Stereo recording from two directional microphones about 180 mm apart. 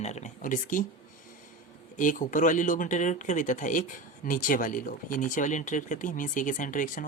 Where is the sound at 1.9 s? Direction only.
45° left (ahead or behind).